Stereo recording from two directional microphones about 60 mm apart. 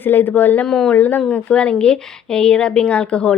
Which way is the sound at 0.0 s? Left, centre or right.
Left.